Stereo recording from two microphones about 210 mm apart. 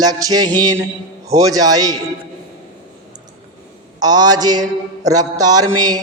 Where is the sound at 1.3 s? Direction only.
15° right (ahead or behind).